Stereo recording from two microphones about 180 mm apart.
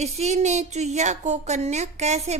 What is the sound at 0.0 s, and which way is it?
A woman's voice, 40° right (ahead or behind).